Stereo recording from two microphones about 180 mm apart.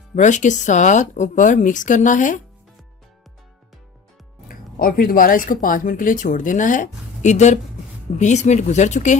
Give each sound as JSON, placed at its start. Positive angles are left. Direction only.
{"t": 0.2, "sound": "speech", "side_deg": 40}
{"t": 4.4, "sound": "speech", "side_deg": 50}